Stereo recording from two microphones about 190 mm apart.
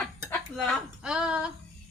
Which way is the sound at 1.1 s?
5° right (ahead or behind).